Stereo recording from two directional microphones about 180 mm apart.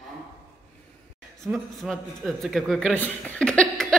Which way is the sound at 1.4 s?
Centre (ahead or behind).